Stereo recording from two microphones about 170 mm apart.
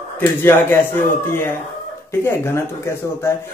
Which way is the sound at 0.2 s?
15° left (ahead or behind).